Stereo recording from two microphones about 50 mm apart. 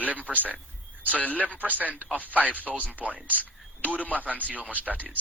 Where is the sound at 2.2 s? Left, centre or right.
Right.